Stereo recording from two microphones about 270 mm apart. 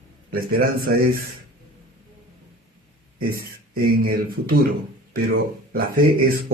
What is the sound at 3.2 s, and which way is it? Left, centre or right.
A man's voice, right.